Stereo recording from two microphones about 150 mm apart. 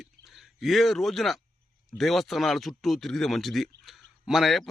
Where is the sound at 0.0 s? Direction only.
Centre (ahead or behind).